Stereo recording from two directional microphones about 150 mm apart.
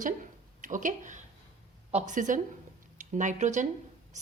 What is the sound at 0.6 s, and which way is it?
A woman's voice, 60° right (ahead or behind).